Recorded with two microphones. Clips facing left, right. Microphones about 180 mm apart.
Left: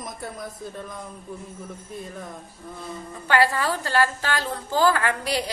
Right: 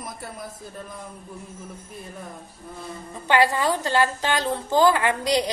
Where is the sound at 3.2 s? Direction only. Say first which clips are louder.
Right 1 dB; 20° right (ahead or behind).